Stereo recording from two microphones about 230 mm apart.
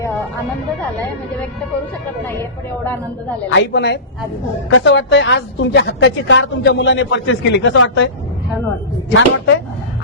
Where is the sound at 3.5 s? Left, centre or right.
Left.